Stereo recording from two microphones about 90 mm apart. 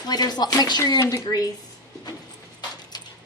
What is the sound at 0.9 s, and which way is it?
Speech, 35° left (ahead or behind).